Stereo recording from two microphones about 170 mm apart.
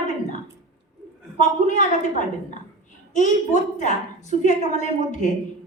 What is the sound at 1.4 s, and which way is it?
A woman's voice, 45° left (ahead or behind).